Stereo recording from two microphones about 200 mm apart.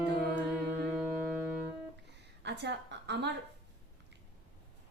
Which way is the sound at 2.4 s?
60° right (ahead or behind).